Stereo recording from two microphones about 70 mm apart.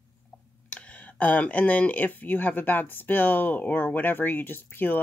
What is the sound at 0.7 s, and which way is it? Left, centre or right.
Speech, centre.